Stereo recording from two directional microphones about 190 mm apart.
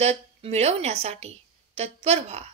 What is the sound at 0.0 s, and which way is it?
A woman's voice, 35° right (ahead or behind).